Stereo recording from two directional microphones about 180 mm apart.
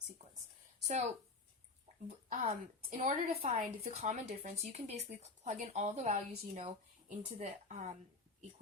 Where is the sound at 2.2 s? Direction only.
40° right (ahead or behind).